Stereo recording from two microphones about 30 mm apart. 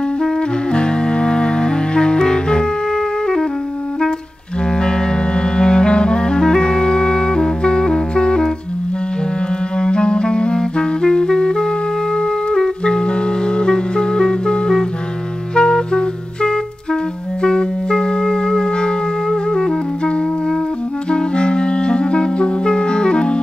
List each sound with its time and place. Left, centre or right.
0.7 s music: left
4.7 s clarinet: left
9.8 s clarinet: left
12.2 s music: left
21.1 s clarinet: left